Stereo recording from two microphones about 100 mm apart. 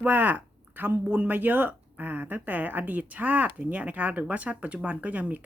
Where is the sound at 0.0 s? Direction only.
15° right (ahead or behind).